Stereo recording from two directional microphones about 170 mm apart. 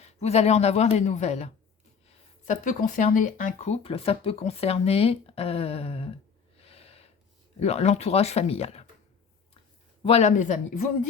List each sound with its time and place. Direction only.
0.0 s speech: 40° left (ahead or behind)
6.6 s gasp: 35° left (ahead or behind)
7.6 s speech: 40° left (ahead or behind)
10.0 s speech: 35° left (ahead or behind)